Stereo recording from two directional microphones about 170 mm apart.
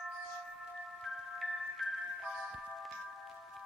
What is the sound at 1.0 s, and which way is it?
Music, centre (ahead or behind).